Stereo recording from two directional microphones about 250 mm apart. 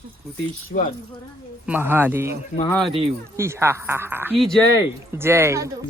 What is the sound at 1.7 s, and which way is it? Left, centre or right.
Mantra, centre.